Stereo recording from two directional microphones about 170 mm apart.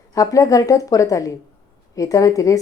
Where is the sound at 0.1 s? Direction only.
20° left (ahead or behind).